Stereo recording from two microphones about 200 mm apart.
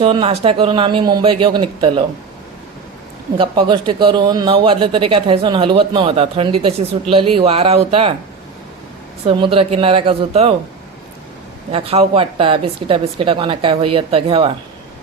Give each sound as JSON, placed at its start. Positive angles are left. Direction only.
{"t": 0.0, "sound": "a man's voice", "side_deg": -25}
{"t": 3.3, "sound": "a man's voice", "side_deg": -25}
{"t": 9.2, "sound": "a man's voice", "side_deg": -25}
{"t": 11.7, "sound": "a man's voice", "side_deg": -30}